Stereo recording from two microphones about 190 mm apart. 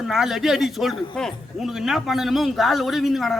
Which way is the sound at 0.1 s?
Centre (ahead or behind).